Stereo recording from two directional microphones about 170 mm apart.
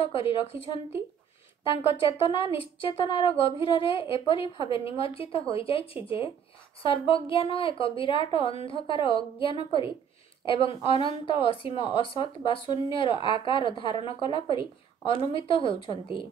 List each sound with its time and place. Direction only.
0.0 s a woman's voice: 35° left (ahead or behind)